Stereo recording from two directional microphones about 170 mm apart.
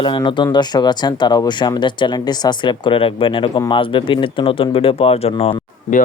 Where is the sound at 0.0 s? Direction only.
30° left (ahead or behind).